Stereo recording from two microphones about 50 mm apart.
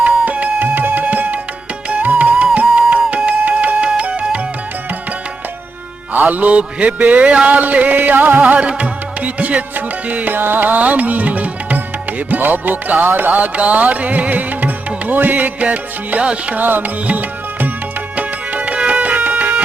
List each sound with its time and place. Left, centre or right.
0.3 s music: right
6.1 s mantra: right
12.3 s music: right
16.6 s music: right